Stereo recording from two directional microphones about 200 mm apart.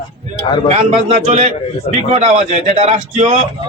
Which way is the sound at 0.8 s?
35° right (ahead or behind).